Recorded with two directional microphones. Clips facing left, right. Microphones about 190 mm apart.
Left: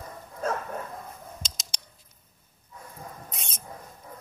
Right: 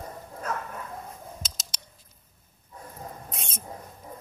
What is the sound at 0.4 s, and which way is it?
Bow-wow, 30° left (ahead or behind).